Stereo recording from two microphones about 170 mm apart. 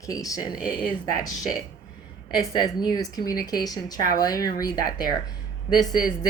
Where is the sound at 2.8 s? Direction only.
20° left (ahead or behind).